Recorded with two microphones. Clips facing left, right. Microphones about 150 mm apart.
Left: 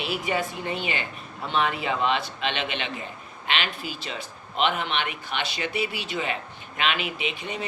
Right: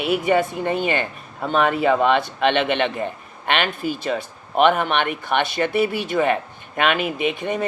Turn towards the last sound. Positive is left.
turn(degrees=-50)  # may be behind; listen again after turning